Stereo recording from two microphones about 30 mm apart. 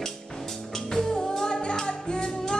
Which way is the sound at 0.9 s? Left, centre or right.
Centre.